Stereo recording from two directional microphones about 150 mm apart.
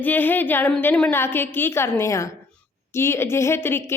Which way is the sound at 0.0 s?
10° left (ahead or behind).